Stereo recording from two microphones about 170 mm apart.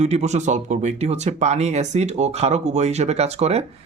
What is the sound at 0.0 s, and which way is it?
Speech, 40° right (ahead or behind).